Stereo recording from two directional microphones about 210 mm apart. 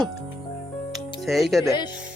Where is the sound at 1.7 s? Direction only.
20° left (ahead or behind).